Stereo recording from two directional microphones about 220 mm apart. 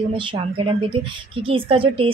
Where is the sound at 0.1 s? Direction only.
25° right (ahead or behind).